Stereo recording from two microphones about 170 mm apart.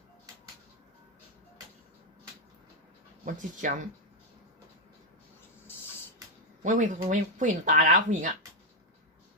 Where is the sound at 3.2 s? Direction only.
50° right (ahead or behind).